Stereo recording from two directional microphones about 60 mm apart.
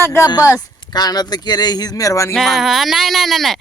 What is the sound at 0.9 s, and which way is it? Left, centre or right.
Speech, left.